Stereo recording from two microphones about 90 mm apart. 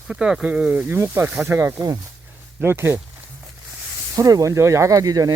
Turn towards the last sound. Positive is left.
turn(degrees=-40)  # may be behind; listen again after turning